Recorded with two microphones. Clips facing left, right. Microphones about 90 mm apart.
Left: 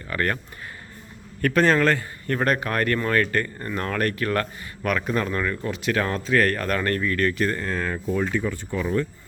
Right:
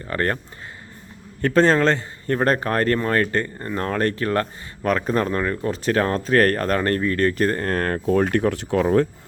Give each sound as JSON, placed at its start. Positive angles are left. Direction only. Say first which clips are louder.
{"t": 0.1, "sound": "a man's voice", "louder": "right 2 dB", "side_deg": -35}
{"t": 1.4, "sound": "a man's voice", "louder": "right 3 dB", "side_deg": -30}
{"t": 7.7, "sound": "speech", "louder": "right 5 dB", "side_deg": -55}